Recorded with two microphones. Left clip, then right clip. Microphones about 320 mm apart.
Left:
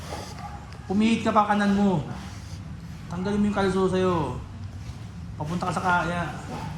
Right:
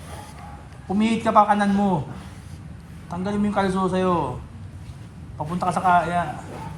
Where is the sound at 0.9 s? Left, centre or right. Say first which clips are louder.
Right 4 dB; centre.